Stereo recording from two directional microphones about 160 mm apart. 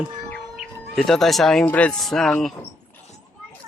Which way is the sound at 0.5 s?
Centre (ahead or behind).